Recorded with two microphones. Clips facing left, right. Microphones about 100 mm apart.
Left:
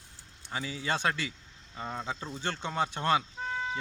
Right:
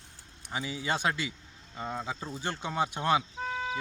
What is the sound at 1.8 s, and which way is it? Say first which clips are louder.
Speech: right 1 dB; 5° right (ahead or behind).